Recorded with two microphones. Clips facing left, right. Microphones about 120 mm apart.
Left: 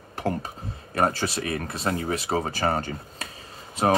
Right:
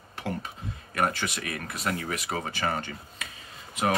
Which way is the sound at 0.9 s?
30° left (ahead or behind).